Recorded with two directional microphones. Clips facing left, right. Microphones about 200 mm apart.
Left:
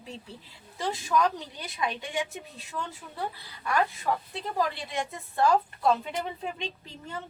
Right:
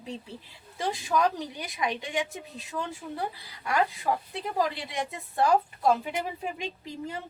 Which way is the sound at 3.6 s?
15° right (ahead or behind).